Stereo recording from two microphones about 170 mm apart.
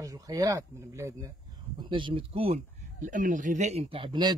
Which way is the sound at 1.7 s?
30° right (ahead or behind).